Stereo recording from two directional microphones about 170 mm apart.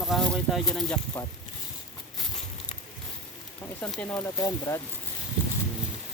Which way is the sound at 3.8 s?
10° left (ahead or behind).